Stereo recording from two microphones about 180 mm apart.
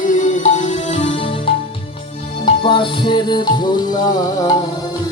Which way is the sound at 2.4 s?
25° left (ahead or behind).